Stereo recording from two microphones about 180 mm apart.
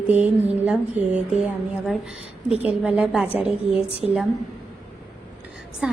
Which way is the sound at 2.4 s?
5° right (ahead or behind).